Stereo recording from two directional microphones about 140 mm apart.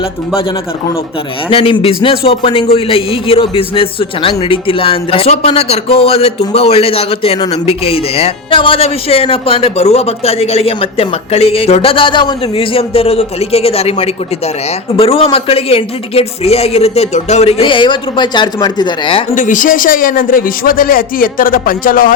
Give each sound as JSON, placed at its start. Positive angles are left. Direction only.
{"t": 1.5, "sound": "a man's voice", "side_deg": 40}
{"t": 19.4, "sound": "a man's voice", "side_deg": 70}